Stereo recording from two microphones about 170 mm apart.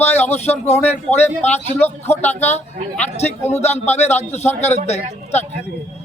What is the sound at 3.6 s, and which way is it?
Speech, 40° left (ahead or behind).